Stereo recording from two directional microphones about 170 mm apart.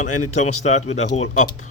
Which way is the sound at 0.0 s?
45° left (ahead or behind).